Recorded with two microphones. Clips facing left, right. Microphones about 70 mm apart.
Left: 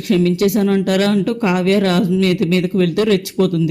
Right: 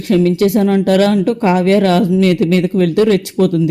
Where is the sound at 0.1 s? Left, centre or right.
Right.